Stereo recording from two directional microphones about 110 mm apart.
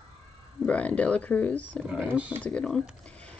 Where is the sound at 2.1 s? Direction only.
15° right (ahead or behind).